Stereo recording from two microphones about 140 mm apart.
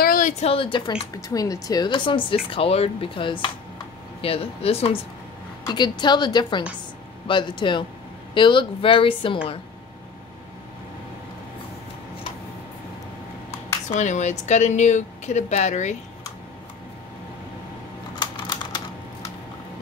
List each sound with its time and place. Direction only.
0.0 s a sound: 90° left
0.3 s speech: 45° left (ahead or behind)
5.7 s speech: 30° left (ahead or behind)
13.8 s speech: 60° left (ahead or behind)
18.2 s typing: 35° left (ahead or behind)